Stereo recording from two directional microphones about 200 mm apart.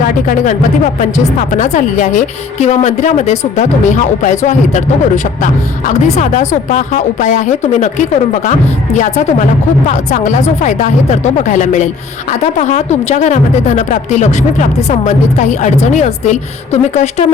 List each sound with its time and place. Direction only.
0.0 s a woman's voice: 40° left (ahead or behind)
9.9 s a woman's voice: 35° left (ahead or behind)